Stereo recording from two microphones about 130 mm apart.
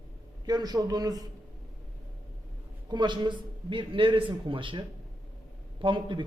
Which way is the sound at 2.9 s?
35° right (ahead or behind).